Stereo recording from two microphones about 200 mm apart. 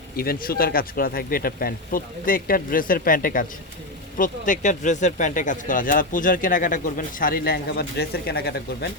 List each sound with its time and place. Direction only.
0.2 s speech: 50° left (ahead or behind)